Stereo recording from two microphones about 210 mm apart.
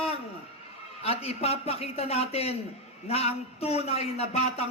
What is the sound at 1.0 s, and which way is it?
A man's voice, 30° left (ahead or behind).